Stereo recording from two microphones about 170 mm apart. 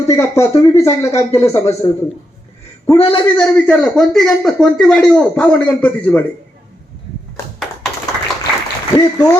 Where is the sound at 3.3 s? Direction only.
5° left (ahead or behind).